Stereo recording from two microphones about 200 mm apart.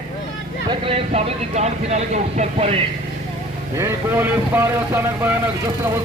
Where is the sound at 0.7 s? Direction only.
30° right (ahead or behind).